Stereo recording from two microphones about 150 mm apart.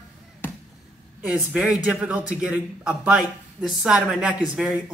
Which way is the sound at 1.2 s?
10° right (ahead or behind).